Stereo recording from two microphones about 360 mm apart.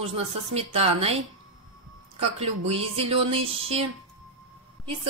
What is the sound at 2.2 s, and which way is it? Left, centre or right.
A woman's voice, centre.